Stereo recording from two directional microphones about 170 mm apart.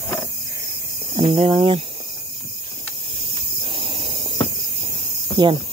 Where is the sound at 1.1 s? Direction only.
30° right (ahead or behind).